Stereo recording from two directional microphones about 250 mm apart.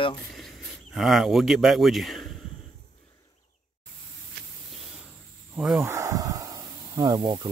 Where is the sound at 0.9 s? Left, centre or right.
Centre.